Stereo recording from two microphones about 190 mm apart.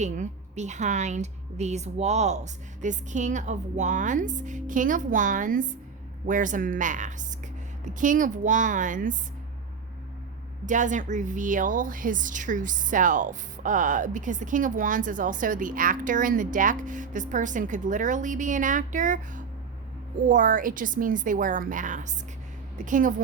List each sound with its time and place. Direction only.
0.0 s a woman's voice: 40° right (ahead or behind)
10.7 s speech: 40° right (ahead or behind)